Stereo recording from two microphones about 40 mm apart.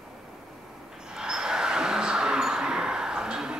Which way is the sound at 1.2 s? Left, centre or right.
Centre.